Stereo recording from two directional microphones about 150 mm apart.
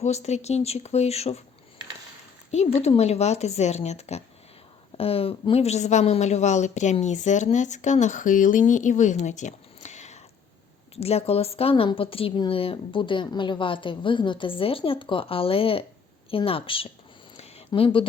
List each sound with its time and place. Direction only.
0.0 s speech: 50° left (ahead or behind)
2.5 s speech: 45° left (ahead or behind)
17.3 s a sound: 40° left (ahead or behind)